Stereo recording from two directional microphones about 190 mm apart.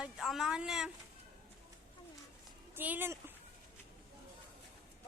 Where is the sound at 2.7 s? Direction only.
10° right (ahead or behind).